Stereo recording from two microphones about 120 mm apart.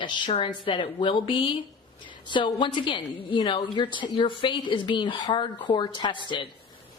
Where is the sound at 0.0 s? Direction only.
45° left (ahead or behind).